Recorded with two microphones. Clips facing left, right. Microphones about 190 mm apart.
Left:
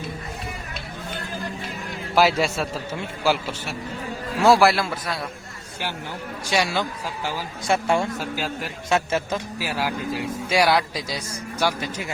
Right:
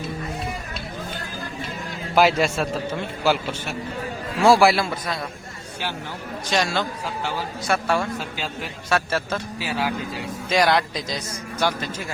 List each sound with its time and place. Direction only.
2.1 s a man's voice: 5° left (ahead or behind)
6.5 s a man's voice: 10° left (ahead or behind)
7.7 s a man's voice: 25° left (ahead or behind)
9.6 s a man's voice: 10° left (ahead or behind)